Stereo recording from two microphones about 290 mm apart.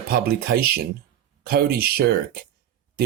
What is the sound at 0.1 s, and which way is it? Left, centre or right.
Speech, right.